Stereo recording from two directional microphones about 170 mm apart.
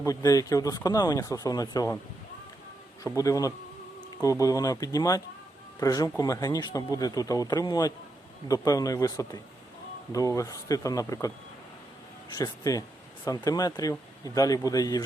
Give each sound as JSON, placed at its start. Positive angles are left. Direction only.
{"t": 0.0, "sound": "speech", "side_deg": 20}
{"t": 3.0, "sound": "speech", "side_deg": 20}
{"t": 12.3, "sound": "speech", "side_deg": 20}